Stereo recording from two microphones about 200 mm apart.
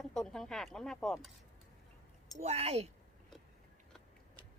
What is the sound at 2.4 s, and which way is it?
Speech, 30° right (ahead or behind).